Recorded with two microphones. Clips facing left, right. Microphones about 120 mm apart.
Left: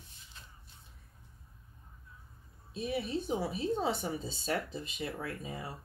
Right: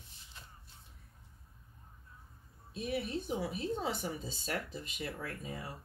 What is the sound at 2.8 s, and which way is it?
Speech, 30° left (ahead or behind).